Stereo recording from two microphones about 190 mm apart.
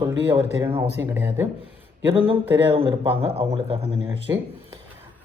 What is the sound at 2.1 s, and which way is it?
Speech, 30° right (ahead or behind).